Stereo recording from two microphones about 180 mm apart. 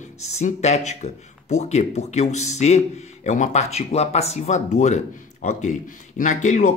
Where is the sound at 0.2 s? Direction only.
40° left (ahead or behind).